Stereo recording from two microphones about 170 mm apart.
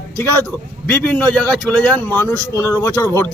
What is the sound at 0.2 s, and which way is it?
Speech, 15° left (ahead or behind).